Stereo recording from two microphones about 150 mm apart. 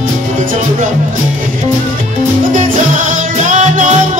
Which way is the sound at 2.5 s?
55° right (ahead or behind).